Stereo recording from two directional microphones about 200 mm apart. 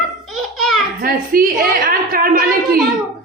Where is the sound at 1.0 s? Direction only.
45° right (ahead or behind).